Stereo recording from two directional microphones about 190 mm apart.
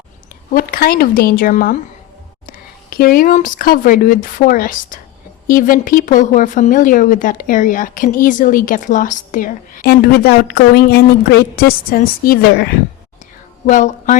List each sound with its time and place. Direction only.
0.5 s a woman's voice: 50° left (ahead or behind)
13.7 s speech: 40° left (ahead or behind)